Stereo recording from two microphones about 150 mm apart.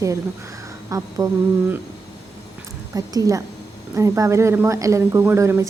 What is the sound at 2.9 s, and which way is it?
A woman's voice, 25° right (ahead or behind).